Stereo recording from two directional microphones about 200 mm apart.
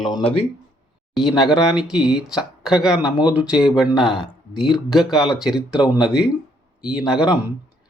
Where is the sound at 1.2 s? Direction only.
Centre (ahead or behind).